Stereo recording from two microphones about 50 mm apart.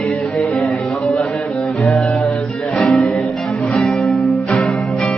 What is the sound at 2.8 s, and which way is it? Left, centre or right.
Music, centre.